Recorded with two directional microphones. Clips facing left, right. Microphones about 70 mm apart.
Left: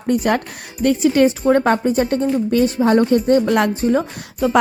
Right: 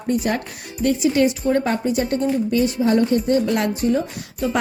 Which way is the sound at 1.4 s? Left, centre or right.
Left.